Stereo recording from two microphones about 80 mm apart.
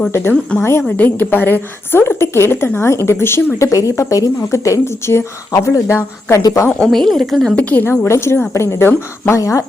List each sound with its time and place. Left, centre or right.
0.6 s a woman's voice: left
0.9 s a woman's voice: centre; by 6.7 s left
6.7 s a woman's voice: centre
7.5 s a woman's voice: centre
8.0 s a woman's voice: left
9.4 s a woman's voice: left